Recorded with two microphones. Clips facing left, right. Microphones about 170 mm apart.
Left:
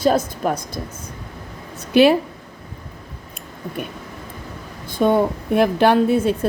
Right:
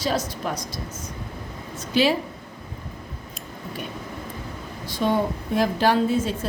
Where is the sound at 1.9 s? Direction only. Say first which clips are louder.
Left 8 dB; 60° left (ahead or behind).